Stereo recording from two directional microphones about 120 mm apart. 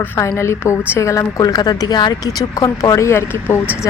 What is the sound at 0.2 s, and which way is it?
Speech, 25° left (ahead or behind).